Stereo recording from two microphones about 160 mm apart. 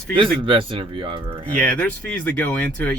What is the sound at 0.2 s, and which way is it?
Speech, 30° right (ahead or behind).